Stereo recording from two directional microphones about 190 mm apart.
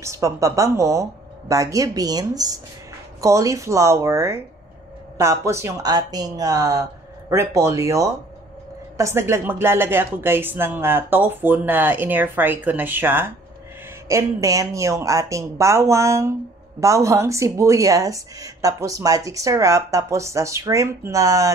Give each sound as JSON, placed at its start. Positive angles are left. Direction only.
{"t": 0.0, "sound": "a woman's voice", "side_deg": -15}